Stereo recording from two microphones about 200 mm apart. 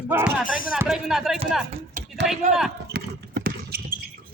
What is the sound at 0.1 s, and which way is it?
Speech, 5° right (ahead or behind).